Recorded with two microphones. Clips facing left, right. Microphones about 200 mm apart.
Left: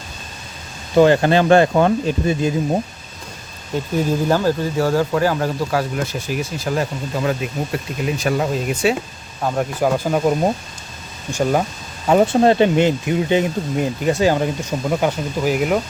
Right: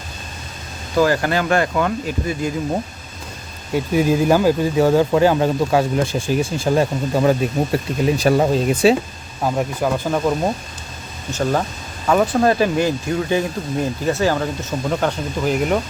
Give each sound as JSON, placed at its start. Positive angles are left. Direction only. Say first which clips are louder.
{"t": 0.9, "sound": "speech", "louder": "left 4 dB", "side_deg": 25}
{"t": 3.8, "sound": "speech", "louder": "right 3 dB", "side_deg": -10}
{"t": 9.8, "sound": "speech", "louder": "left 3 dB", "side_deg": 10}
{"t": 12.0, "sound": "speech", "louder": "left 2 dB", "side_deg": 25}